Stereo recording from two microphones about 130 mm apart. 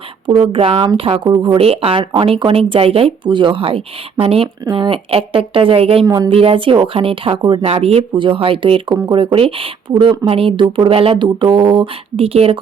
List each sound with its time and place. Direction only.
0.3 s speech: 45° right (ahead or behind)
6.1 s speech: 35° right (ahead or behind)
6.3 s speech: 45° right (ahead or behind)